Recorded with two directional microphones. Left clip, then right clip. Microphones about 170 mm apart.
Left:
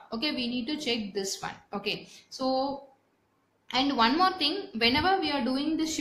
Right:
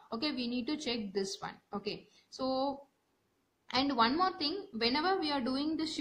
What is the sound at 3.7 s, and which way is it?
A woman's voice, 30° right (ahead or behind).